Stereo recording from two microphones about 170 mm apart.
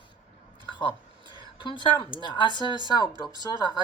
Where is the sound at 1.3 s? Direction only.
30° left (ahead or behind).